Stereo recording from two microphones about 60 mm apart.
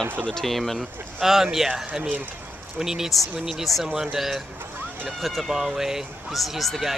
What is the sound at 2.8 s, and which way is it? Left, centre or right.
Speech, centre.